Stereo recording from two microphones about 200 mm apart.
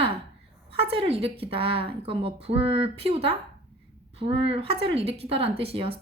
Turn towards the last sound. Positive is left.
turn(degrees=-30)  # may be behind; listen again after turning